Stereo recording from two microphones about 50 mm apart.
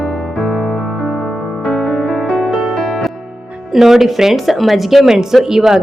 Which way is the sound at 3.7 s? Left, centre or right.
Centre.